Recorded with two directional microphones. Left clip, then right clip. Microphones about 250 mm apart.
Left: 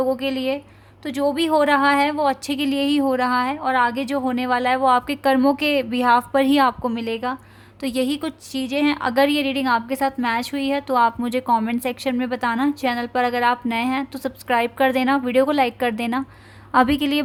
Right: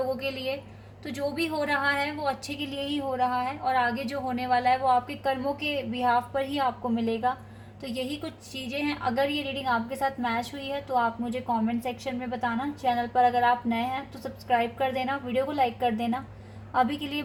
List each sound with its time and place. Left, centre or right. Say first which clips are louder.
0.2 s a woman's voice: left 8 dB; left
7.8 s a woman's voice: left 10 dB; left